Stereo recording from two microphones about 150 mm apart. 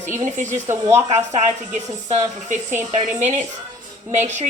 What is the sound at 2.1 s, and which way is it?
A woman's voice, 50° right (ahead or behind).